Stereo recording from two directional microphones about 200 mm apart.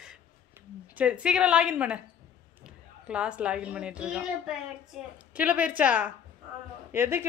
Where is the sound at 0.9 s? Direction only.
5° right (ahead or behind).